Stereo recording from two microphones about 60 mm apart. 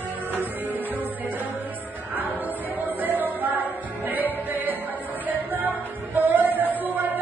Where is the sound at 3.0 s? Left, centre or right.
Right.